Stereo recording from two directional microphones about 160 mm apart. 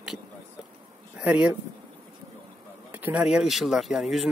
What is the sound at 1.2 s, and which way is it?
Speech, 10° right (ahead or behind).